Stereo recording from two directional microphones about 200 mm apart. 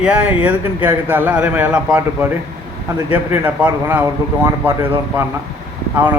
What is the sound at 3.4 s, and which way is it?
A man's voice, 5° right (ahead or behind).